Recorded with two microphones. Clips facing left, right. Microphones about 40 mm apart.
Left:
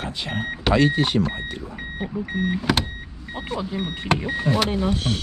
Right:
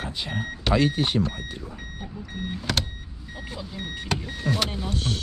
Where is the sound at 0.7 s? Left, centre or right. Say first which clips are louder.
Left 3 dB; centre.